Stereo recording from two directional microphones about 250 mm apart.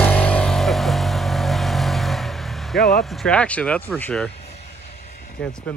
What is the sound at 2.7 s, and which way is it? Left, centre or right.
Speech, left.